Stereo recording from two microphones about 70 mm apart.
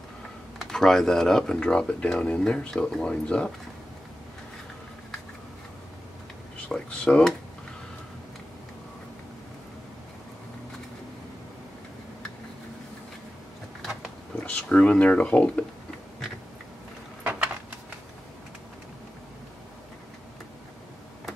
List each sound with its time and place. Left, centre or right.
0.6 s speech: centre
6.9 s speech: centre
14.4 s speech: centre
17.2 s a sound: right